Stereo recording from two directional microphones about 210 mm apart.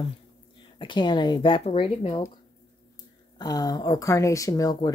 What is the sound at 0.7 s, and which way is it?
Speech, 20° left (ahead or behind).